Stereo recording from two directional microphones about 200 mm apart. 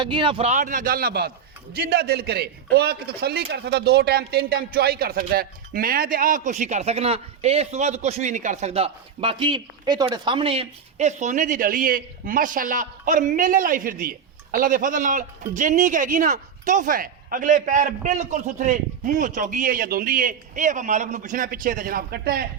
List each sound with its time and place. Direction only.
0.0 s a man's voice: 25° right (ahead or behind); by 22.4 s 50° right (ahead or behind)